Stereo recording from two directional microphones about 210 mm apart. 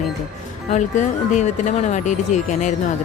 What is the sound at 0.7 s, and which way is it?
Speech, 35° left (ahead or behind).